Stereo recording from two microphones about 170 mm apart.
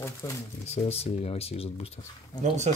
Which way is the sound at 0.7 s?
35° left (ahead or behind).